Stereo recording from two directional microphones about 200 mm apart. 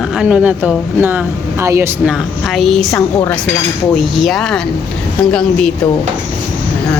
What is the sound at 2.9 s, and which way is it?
Speech, 15° left (ahead or behind).